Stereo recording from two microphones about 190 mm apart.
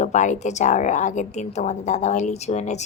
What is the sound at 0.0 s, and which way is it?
A woman's voice, 40° left (ahead or behind).